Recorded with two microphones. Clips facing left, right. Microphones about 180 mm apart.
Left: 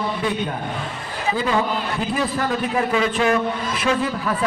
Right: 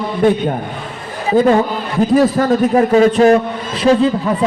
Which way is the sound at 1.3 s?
45° right (ahead or behind).